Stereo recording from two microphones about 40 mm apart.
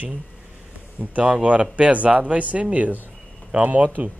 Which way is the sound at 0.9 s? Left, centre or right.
Right.